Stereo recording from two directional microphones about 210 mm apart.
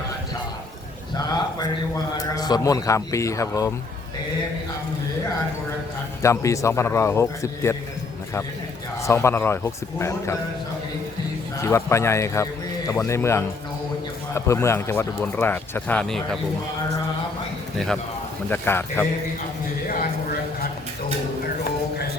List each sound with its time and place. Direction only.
1.1 s a sound: 20° left (ahead or behind)
2.1 s speech: 20° left (ahead or behind)
6.2 s speech: 15° left (ahead or behind)
9.0 s speech: 15° left (ahead or behind)
11.6 s speech: 15° left (ahead or behind)
18.4 s speech: 10° left (ahead or behind)